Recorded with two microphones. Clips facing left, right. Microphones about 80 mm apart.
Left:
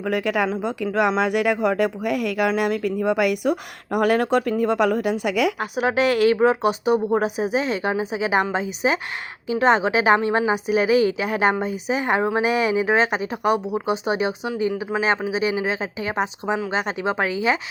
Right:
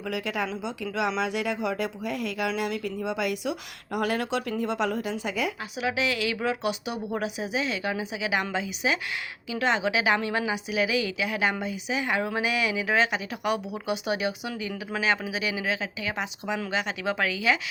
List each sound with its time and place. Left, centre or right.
0.0 s speech: left
5.5 s a woman's voice: left